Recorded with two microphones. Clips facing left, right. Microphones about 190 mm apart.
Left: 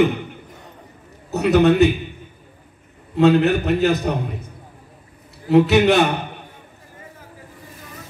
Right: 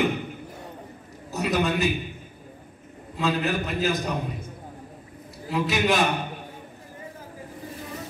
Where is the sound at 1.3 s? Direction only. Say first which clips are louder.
Left 10 dB; 65° left (ahead or behind).